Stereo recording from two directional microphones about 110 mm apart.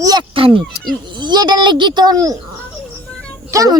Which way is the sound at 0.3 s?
55° right (ahead or behind).